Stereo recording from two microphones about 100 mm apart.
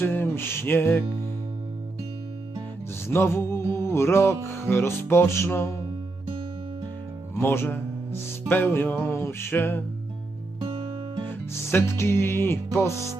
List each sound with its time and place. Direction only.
0.0 s music: 25° left (ahead or behind)
3.1 s music: 25° left (ahead or behind)
7.3 s music: 25° left (ahead or behind)
11.3 s music: 25° left (ahead or behind)